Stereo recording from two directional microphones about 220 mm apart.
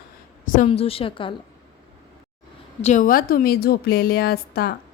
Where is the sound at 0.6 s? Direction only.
25° left (ahead or behind).